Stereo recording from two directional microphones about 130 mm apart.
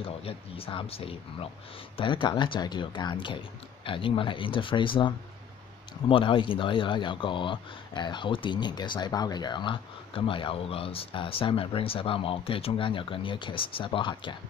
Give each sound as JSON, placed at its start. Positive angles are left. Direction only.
{"t": 0.0, "sound": "speech", "side_deg": 45}